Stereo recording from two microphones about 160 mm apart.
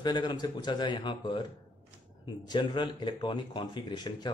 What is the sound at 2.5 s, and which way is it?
Speech, 30° left (ahead or behind).